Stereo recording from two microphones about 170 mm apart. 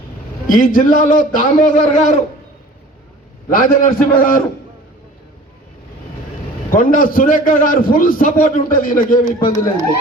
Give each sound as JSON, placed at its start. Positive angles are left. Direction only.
{"t": 0.4, "sound": "a man's voice", "side_deg": 50}
{"t": 3.5, "sound": "a man's voice", "side_deg": 55}
{"t": 6.7, "sound": "a man's voice", "side_deg": 55}